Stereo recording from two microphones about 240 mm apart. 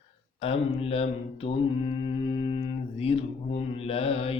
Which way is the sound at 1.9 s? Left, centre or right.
Left.